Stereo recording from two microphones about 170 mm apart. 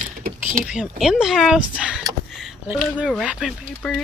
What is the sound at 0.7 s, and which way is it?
Speech, 5° right (ahead or behind).